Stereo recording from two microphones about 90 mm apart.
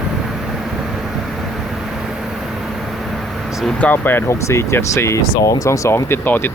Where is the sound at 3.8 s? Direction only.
20° left (ahead or behind).